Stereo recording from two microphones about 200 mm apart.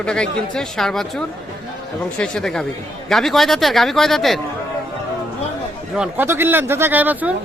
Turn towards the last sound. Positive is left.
turn(degrees=-10)  # may be behind; listen again after turning